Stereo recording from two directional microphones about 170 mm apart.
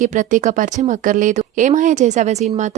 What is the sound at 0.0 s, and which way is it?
Speech, 50° right (ahead or behind).